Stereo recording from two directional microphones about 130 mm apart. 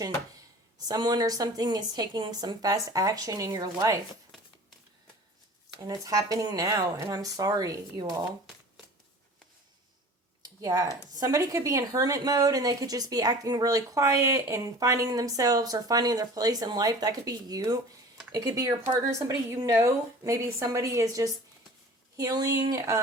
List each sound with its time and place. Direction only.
0.9 s speech: 30° right (ahead or behind)
5.8 s speech: 25° right (ahead or behind)
10.6 s speech: 30° right (ahead or behind)